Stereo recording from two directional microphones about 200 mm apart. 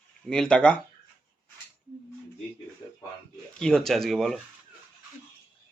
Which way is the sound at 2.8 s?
Centre (ahead or behind).